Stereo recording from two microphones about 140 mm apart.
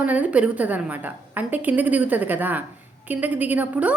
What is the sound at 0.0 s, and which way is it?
A woman's voice, 10° right (ahead or behind).